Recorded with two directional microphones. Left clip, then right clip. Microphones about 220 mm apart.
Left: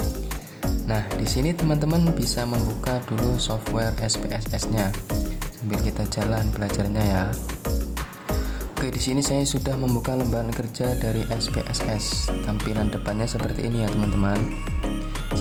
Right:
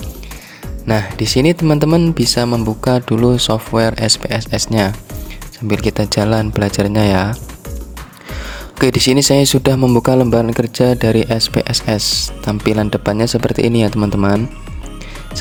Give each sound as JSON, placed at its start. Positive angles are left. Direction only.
{"t": 0.9, "sound": "speech", "side_deg": -40}
{"t": 8.8, "sound": "speech", "side_deg": -40}